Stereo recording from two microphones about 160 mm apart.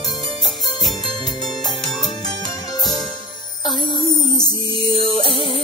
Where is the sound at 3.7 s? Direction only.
Centre (ahead or behind).